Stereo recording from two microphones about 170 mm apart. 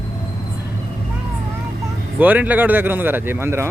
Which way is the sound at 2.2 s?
10° right (ahead or behind).